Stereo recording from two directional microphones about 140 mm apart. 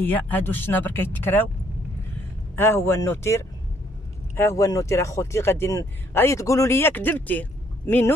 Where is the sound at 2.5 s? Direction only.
15° left (ahead or behind).